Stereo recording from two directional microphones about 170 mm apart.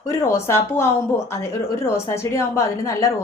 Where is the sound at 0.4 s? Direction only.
15° left (ahead or behind).